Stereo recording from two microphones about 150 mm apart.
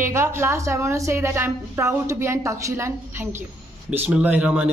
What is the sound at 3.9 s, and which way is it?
Speech, 10° right (ahead or behind).